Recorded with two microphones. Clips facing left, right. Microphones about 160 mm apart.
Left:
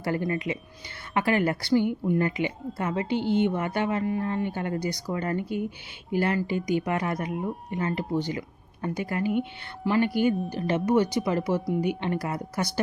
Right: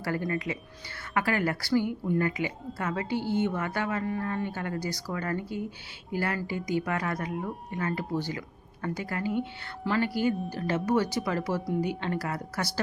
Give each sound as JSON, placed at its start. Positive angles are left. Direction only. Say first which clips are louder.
{"t": 0.3, "sound": "a woman's voice", "louder": "left 3 dB", "side_deg": 20}